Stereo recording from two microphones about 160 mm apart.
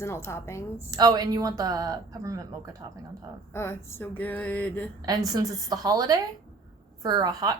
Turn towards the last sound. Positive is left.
turn(degrees=-25)  # may be behind; listen again after turning